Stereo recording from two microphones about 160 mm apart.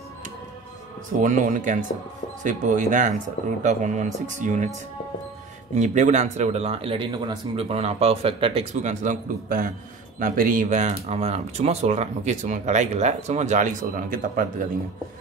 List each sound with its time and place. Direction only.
1.2 s speech: 55° right (ahead or behind)
5.8 s speech: 50° right (ahead or behind)
8.8 s speech: 50° right (ahead or behind)